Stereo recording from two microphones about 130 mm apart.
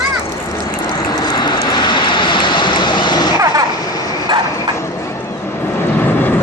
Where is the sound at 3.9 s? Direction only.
30° left (ahead or behind).